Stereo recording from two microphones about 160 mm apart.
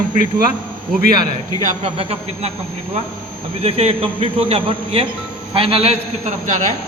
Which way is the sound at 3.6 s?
40° right (ahead or behind).